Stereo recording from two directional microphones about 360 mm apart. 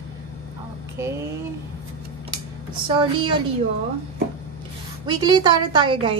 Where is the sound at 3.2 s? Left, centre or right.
Centre.